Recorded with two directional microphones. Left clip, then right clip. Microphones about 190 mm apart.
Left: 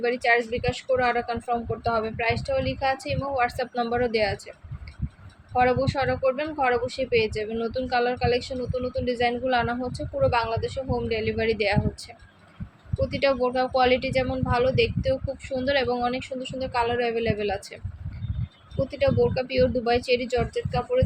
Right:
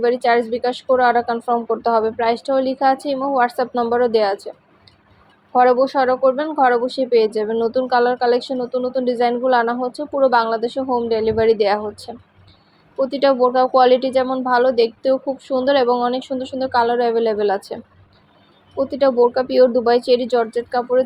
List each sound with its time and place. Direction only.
0.0 s speech: 10° right (ahead or behind)
5.5 s speech: 5° right (ahead or behind)
18.8 s speech: 15° right (ahead or behind)